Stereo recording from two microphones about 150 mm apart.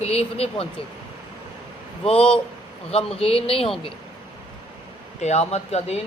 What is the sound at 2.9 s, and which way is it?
Speech, 40° left (ahead or behind).